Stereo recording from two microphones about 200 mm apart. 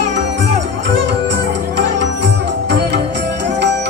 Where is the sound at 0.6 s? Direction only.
60° right (ahead or behind).